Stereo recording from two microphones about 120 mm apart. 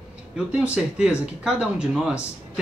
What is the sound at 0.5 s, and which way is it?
Speech, 10° right (ahead or behind).